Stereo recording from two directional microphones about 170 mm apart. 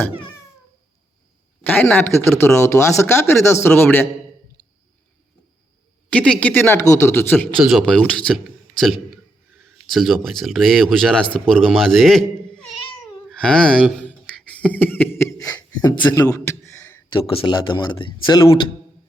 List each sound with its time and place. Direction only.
1.7 s speech: 5° left (ahead or behind)
6.1 s speech: 5° left (ahead or behind)
13.3 s speech: 5° left (ahead or behind)
14.1 s beatboxing: 5° left (ahead or behind)
17.1 s speech: 30° left (ahead or behind)